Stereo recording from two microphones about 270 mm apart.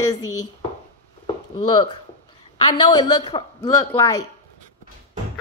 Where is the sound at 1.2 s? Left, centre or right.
Centre.